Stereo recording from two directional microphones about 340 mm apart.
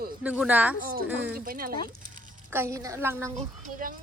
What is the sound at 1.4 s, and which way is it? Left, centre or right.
Speech, right.